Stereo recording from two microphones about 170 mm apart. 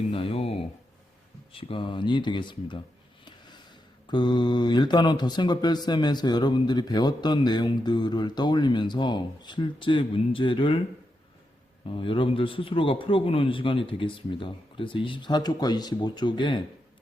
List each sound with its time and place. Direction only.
0.1 s a sound: 35° left (ahead or behind)
1.5 s speech: 30° left (ahead or behind)
4.1 s speech: 25° left (ahead or behind)
11.9 s a man's voice: 30° left (ahead or behind)